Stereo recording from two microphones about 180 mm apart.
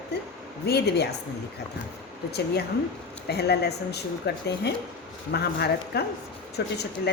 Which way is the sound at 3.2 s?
65° left (ahead or behind).